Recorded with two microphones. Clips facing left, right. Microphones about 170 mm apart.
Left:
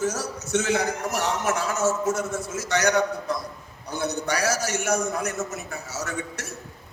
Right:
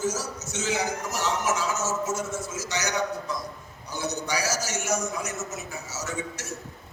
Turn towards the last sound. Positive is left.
turn(degrees=60)  # may be behind; listen again after turning